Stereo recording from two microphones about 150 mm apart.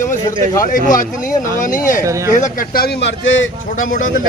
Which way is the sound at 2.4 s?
70° left (ahead or behind).